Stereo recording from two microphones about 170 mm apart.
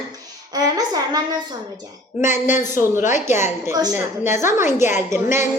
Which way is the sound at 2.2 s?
45° left (ahead or behind).